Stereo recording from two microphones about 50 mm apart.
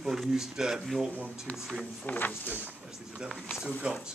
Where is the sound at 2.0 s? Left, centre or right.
Left.